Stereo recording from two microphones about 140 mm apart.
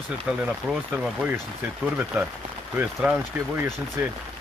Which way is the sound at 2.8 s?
15° right (ahead or behind).